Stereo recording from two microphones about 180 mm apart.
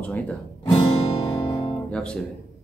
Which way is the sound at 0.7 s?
20° left (ahead or behind).